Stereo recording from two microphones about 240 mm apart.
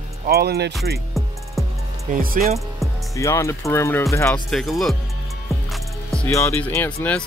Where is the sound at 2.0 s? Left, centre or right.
Right.